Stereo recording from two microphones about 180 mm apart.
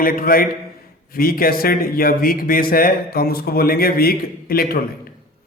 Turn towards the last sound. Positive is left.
turn(degrees=55)  # may be behind; listen again after turning